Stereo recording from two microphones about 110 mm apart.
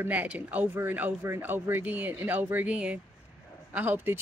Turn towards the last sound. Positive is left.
turn(degrees=-20)  # may be behind; listen again after turning